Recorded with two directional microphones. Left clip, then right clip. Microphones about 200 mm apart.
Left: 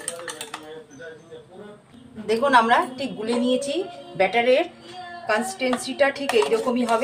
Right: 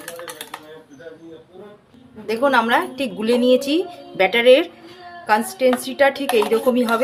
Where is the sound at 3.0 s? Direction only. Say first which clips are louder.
Right 6 dB; 50° right (ahead or behind).